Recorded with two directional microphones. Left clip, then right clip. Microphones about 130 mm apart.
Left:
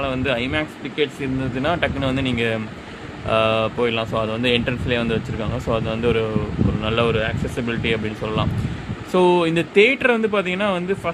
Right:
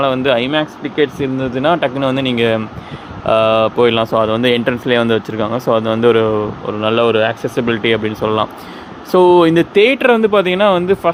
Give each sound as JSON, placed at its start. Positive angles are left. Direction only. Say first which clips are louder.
{"t": 0.0, "sound": "speech", "louder": "right 9 dB", "side_deg": -35}